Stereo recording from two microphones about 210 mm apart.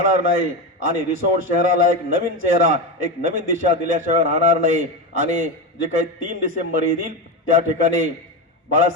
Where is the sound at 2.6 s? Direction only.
40° right (ahead or behind).